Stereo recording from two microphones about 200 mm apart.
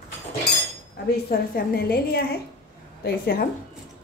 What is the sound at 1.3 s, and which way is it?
Speech, 50° left (ahead or behind).